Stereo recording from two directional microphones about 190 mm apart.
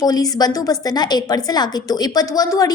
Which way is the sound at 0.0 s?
20° left (ahead or behind).